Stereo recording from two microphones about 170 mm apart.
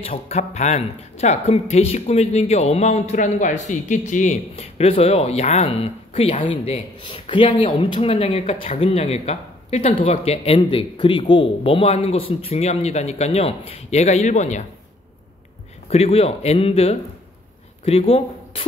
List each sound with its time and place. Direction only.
0.1 s speech: 45° left (ahead or behind)
15.9 s speech: 35° left (ahead or behind)